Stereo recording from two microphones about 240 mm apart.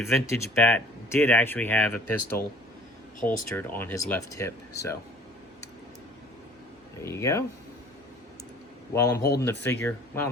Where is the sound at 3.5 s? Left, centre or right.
Centre.